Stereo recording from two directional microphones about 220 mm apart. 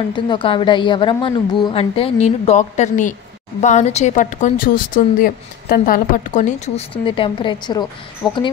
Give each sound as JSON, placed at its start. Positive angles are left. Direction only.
{"t": 0.1, "sound": "a woman's voice", "side_deg": 20}